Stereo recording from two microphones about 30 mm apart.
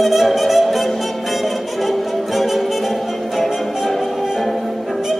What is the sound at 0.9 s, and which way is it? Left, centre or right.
Music, centre.